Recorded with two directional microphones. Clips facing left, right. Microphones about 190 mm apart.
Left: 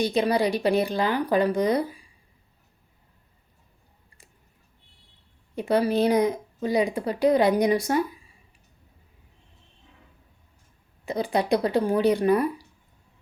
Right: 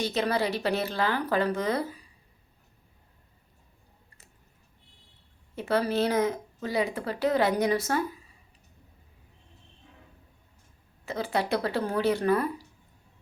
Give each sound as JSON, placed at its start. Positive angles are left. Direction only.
{"t": 0.0, "sound": "speech", "side_deg": 15}
{"t": 5.5, "sound": "speech", "side_deg": 15}
{"t": 11.0, "sound": "speech", "side_deg": 15}